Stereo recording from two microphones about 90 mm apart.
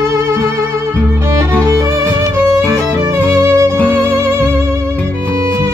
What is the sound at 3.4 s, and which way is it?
Music, 30° right (ahead or behind).